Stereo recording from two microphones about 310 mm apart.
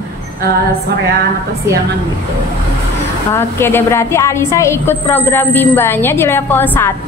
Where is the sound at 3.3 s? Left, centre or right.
Centre.